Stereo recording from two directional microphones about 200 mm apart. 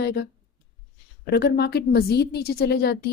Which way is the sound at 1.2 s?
55° left (ahead or behind).